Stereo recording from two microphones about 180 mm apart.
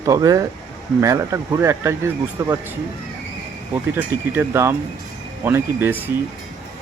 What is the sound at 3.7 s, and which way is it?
Speech, 10° right (ahead or behind).